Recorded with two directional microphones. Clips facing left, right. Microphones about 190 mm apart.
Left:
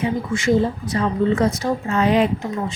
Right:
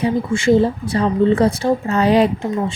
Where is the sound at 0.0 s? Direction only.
30° right (ahead or behind).